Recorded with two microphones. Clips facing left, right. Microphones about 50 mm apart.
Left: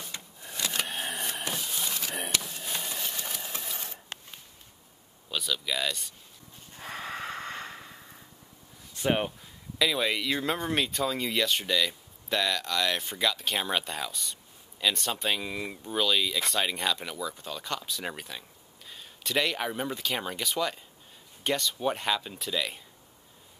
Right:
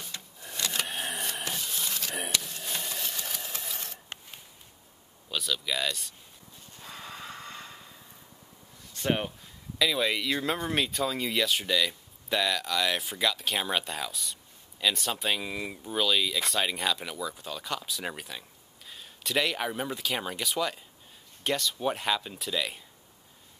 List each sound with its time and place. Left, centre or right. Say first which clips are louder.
0.0 s a sound: left 1 dB; centre
2.3 s sewing machine: even; centre
5.3 s speech: even; centre
6.8 s snort: left 6 dB; left
8.9 s speech: left 2 dB; centre